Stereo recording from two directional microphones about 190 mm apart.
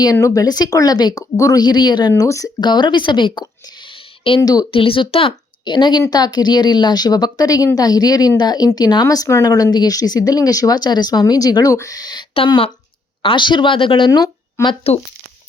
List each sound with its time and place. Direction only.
0.0 s speech: 15° left (ahead or behind)